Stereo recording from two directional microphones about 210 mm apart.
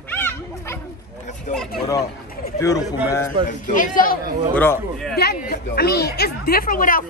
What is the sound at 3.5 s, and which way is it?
Speech, 40° left (ahead or behind).